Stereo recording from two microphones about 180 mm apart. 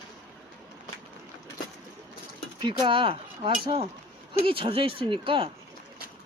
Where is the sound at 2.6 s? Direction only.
25° right (ahead or behind).